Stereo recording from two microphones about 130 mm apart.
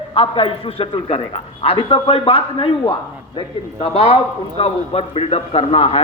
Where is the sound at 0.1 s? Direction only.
45° left (ahead or behind).